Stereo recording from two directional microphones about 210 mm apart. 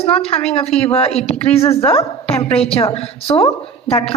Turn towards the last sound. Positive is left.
turn(degrees=30)  # may be behind; listen again after turning